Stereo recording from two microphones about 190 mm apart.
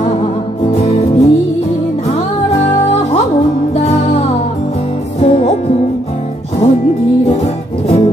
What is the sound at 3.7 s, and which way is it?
Music, 35° left (ahead or behind).